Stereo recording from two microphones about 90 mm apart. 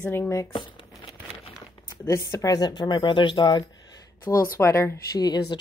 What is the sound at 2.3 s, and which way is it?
Speech, 40° left (ahead or behind).